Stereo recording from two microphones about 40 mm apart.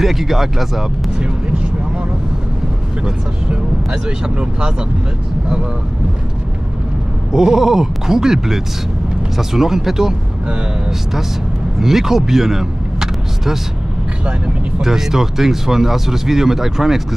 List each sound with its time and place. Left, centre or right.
0.0 s speech: centre
3.4 s speech: right
7.3 s speech: centre
11.8 s speech: centre
14.8 s speech: centre